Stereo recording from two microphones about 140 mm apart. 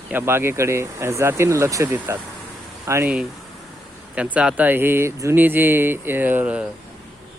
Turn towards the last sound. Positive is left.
turn(degrees=-10)  # may be behind; listen again after turning